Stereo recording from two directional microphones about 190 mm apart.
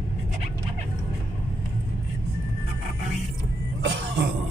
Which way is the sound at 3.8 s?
70° right (ahead or behind).